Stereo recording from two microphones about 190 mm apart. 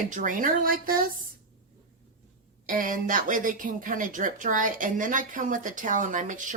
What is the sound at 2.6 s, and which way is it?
Speech, 45° right (ahead or behind).